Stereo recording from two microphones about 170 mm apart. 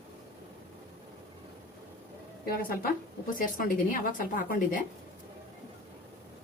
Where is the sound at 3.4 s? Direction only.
55° left (ahead or behind).